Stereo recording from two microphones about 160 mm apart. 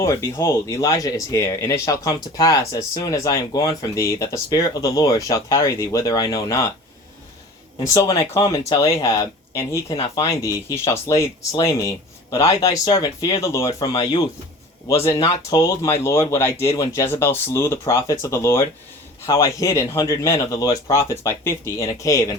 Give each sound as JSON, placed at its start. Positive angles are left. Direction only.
{"t": 0.0, "sound": "speech", "side_deg": 20}
{"t": 7.9, "sound": "speech", "side_deg": 20}